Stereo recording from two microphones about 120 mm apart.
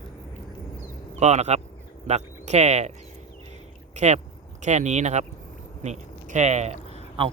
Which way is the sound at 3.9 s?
70° right (ahead or behind).